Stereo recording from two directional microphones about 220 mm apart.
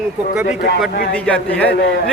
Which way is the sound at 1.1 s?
5° left (ahead or behind).